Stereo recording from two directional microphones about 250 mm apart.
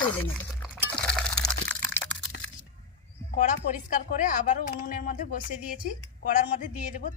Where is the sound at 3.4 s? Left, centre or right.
Left.